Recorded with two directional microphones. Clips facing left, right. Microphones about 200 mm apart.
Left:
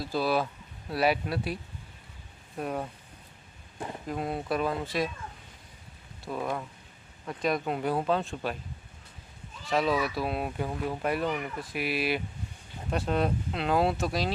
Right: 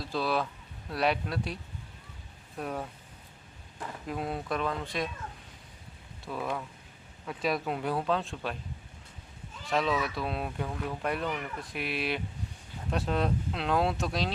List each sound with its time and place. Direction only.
0.0 s speech: 5° left (ahead or behind)
2.6 s speech: 5° left (ahead or behind)
3.8 s speech: 25° left (ahead or behind)
4.0 s speech: centre (ahead or behind)
6.2 s speech: centre (ahead or behind)
9.6 s speech: 5° left (ahead or behind)